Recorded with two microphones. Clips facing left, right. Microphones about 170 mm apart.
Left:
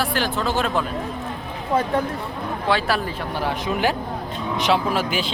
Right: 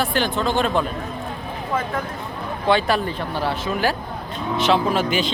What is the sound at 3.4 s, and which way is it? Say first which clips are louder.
Speech: even; 15° left (ahead or behind).